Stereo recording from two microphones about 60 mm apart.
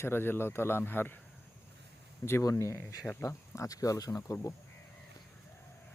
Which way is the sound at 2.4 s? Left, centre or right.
Left.